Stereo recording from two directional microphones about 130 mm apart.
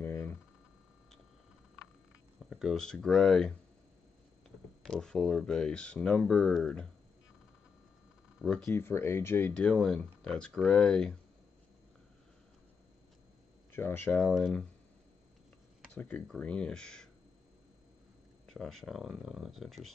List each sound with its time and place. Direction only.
0.0 s a sound: 15° left (ahead or behind)
2.5 s speech: centre (ahead or behind)
4.8 s speech: 5° left (ahead or behind)
8.5 s speech: 5° left (ahead or behind)
8.7 s speech: 20° left (ahead or behind)
9.5 s speech: 5° left (ahead or behind)
13.7 s speech: 20° left (ahead or behind)
15.9 s speech: 10° left (ahead or behind)
18.5 s speech: 5° left (ahead or behind)